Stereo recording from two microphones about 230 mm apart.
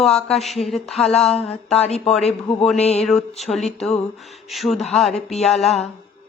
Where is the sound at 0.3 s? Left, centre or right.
Centre.